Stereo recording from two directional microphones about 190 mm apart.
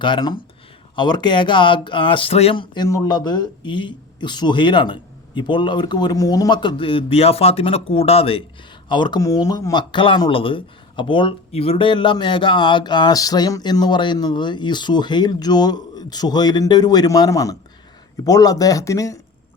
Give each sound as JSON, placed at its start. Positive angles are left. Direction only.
{"t": 0.0, "sound": "speech", "side_deg": 25}